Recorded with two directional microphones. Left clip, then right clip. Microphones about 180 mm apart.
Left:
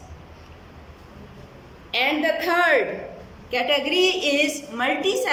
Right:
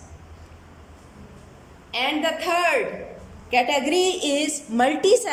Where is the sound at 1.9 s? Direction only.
5° right (ahead or behind).